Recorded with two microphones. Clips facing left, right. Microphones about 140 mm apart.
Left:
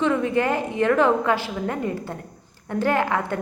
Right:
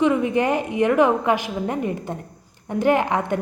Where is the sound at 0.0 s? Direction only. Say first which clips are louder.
Right 2 dB; 15° right (ahead or behind).